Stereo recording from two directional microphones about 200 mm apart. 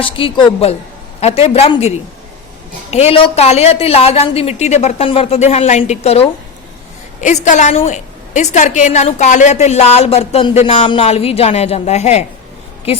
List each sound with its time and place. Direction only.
0.0 s a woman's voice: 25° left (ahead or behind)
2.9 s a woman's voice: 30° left (ahead or behind)